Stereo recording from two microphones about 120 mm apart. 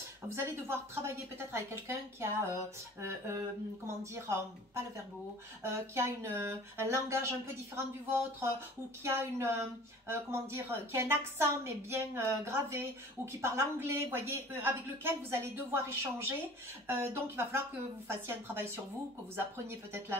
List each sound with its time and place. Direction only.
0.4 s a woman's voice: 20° right (ahead or behind)
5.9 s a woman's voice: 20° right (ahead or behind)